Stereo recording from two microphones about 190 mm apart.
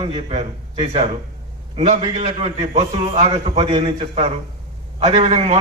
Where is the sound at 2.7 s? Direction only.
40° right (ahead or behind).